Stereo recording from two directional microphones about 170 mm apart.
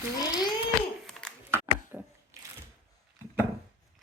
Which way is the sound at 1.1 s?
5° left (ahead or behind).